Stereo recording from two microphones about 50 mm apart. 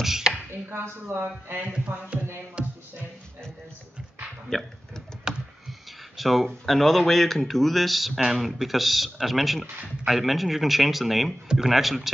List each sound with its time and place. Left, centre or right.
0.0 s chopping: centre
1.0 s speech: right
2.6 s music: centre
4.5 s speech: centre
5.3 s computer keyboard: centre
6.1 s speech: centre